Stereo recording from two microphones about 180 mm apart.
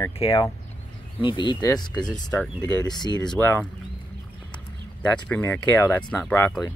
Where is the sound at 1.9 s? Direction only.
5° left (ahead or behind).